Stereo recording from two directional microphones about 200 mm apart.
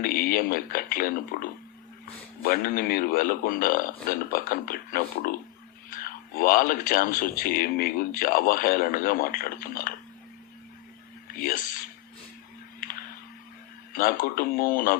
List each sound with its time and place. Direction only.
0.0 s speech: 45° left (ahead or behind)
11.3 s speech: 45° left (ahead or behind)
13.9 s speech: 45° left (ahead or behind)